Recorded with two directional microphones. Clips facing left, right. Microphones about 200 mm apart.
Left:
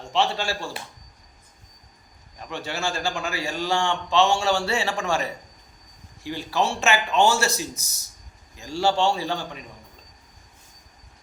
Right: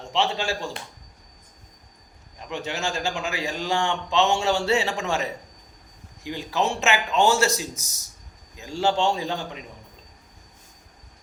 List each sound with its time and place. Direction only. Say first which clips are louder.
0.2 s a man's voice: left 1 dB; 15° right (ahead or behind)
2.5 s a man's voice: even; 20° right (ahead or behind)